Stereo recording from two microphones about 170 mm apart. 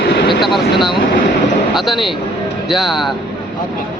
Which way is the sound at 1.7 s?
Centre (ahead or behind).